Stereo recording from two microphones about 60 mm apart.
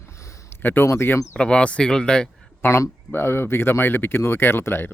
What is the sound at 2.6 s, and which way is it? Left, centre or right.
Speech, left.